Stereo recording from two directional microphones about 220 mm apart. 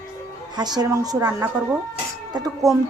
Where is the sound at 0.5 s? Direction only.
20° right (ahead or behind).